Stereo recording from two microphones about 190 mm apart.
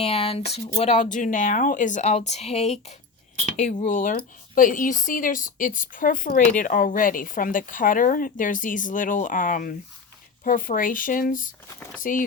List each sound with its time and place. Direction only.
0.0 s speech: 30° left (ahead or behind)